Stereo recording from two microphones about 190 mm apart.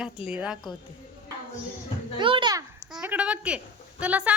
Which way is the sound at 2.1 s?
25° right (ahead or behind).